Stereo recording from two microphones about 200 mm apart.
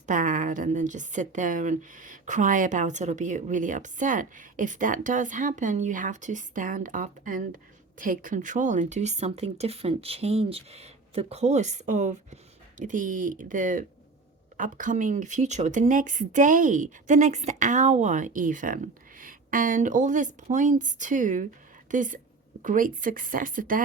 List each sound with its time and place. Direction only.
0.0 s a woman's voice: 40° right (ahead or behind)